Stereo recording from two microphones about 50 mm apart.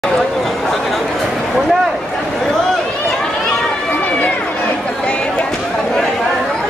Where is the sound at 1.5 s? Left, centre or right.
Centre.